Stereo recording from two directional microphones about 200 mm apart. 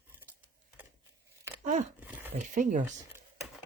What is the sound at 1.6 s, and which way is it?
Speech, 40° right (ahead or behind).